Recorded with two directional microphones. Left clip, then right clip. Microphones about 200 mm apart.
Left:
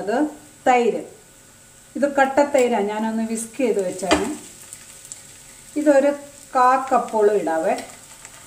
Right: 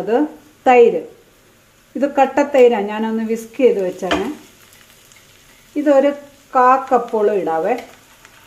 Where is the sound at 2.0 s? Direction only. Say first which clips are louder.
Right 2 dB; 45° right (ahead or behind).